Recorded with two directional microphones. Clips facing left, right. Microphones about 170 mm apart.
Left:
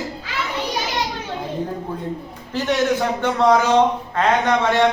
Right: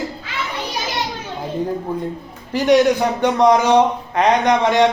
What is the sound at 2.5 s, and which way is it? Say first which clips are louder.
A man's voice: right 6 dB; 15° right (ahead or behind).